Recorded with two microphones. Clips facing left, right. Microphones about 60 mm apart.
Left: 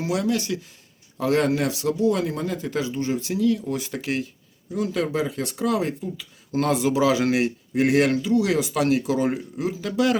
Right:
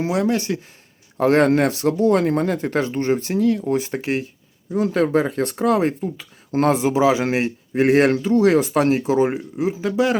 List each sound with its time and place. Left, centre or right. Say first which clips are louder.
0.0 s speech: right 4 dB; right
1.2 s speech: right 6 dB; right